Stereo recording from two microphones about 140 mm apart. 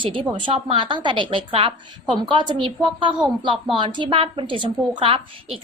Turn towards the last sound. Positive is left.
turn(degrees=-40)  # may be behind; listen again after turning